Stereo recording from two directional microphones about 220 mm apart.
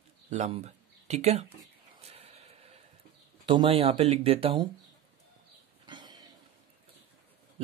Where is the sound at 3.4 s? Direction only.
25° right (ahead or behind).